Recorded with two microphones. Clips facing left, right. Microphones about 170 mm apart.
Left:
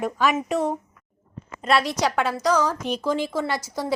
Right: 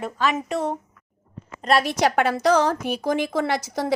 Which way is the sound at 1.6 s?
40° right (ahead or behind).